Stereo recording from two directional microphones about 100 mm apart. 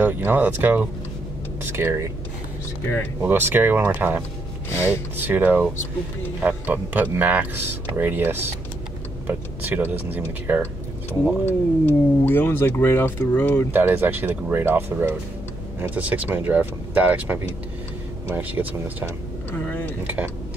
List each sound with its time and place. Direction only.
0.0 s speech: 20° right (ahead or behind)
3.2 s speech: 20° right (ahead or behind)
11.4 s speech: 20° left (ahead or behind)
13.7 s speech: 20° right (ahead or behind)
19.5 s vehicle: 20° left (ahead or behind)